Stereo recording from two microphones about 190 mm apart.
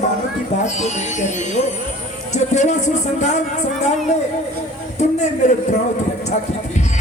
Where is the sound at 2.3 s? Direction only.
35° left (ahead or behind).